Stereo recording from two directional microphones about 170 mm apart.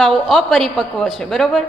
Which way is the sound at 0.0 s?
Centre (ahead or behind).